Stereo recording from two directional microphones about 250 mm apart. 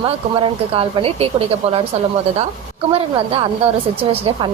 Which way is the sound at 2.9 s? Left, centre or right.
Right.